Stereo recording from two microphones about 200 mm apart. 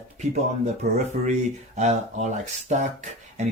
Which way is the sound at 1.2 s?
35° right (ahead or behind).